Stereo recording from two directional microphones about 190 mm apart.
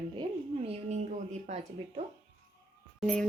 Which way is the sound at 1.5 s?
40° right (ahead or behind).